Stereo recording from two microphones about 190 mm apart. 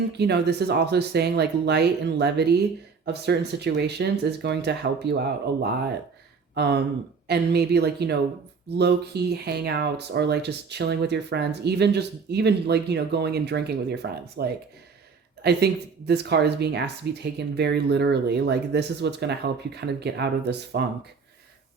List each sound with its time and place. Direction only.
0.1 s speech: 60° right (ahead or behind)